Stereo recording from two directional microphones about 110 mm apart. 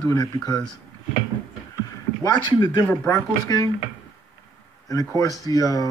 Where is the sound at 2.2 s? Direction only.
40° left (ahead or behind).